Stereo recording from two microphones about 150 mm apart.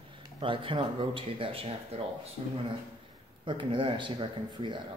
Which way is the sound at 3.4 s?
35° right (ahead or behind).